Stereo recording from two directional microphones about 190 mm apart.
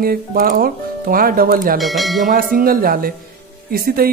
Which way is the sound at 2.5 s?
50° right (ahead or behind).